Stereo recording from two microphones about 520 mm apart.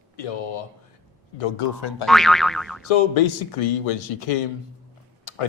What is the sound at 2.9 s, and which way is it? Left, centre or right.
Speech, left.